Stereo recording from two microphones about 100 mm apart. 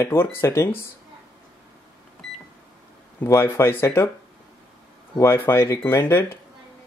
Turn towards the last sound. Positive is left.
turn(degrees=25)  # may be behind; listen again after turning